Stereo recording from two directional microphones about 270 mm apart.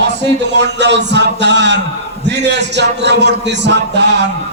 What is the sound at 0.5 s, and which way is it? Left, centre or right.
A man's voice, right.